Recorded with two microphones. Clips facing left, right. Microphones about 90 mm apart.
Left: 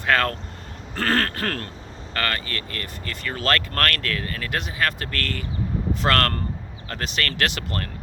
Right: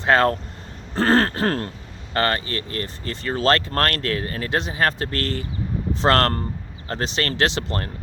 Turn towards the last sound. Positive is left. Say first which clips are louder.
# right 4 dB
turn(degrees=-25)  # may be behind; listen again after turning